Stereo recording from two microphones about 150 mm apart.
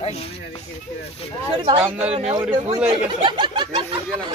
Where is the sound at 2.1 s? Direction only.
50° right (ahead or behind).